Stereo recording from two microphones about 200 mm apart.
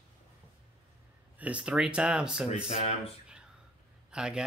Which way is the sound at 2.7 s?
30° left (ahead or behind).